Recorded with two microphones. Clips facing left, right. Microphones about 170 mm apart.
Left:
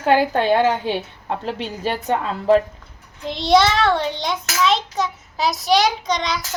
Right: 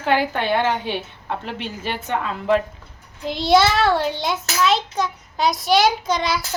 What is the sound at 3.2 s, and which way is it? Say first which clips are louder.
A child's voice: even; centre (ahead or behind).